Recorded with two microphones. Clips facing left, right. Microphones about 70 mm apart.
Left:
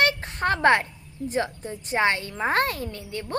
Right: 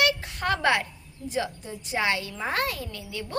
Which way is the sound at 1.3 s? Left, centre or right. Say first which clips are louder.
Left 2 dB; left.